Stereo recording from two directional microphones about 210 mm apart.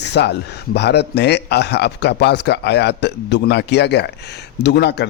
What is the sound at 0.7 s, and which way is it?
A man's voice, 50° left (ahead or behind).